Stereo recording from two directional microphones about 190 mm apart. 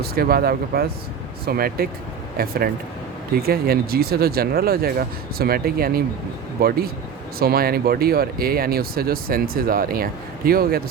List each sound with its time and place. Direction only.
0.0 s speech: 55° right (ahead or behind)